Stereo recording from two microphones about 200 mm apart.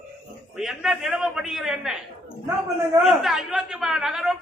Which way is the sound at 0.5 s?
5° right (ahead or behind).